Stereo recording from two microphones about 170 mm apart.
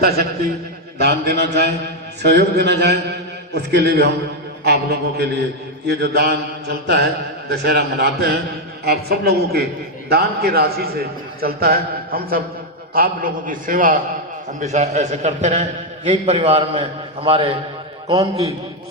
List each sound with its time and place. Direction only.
0.0 s a man's voice: 70° right (ahead or behind); by 14.0 s 55° right (ahead or behind)
14.6 s a man's voice: 40° right (ahead or behind)
18.1 s a man's voice: 20° right (ahead or behind)